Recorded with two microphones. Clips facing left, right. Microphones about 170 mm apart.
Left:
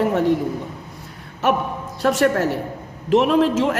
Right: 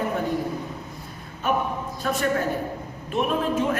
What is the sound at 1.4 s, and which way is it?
A man's voice, 80° left.